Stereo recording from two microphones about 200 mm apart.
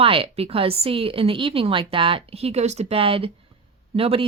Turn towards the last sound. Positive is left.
turn(degrees=-30)  # may be behind; listen again after turning